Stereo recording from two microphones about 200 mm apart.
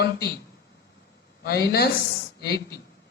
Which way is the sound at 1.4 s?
55° left (ahead or behind).